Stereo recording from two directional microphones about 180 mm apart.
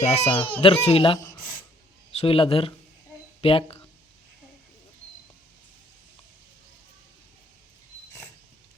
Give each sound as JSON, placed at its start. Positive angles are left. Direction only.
{"t": 0.0, "sound": "speech", "side_deg": 35}